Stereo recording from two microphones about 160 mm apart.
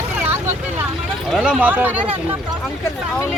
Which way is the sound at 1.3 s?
5° right (ahead or behind).